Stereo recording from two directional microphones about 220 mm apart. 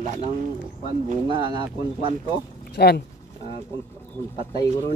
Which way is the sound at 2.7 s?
45° left (ahead or behind).